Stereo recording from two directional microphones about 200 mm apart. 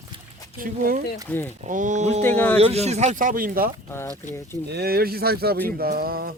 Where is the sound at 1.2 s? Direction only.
10° left (ahead or behind).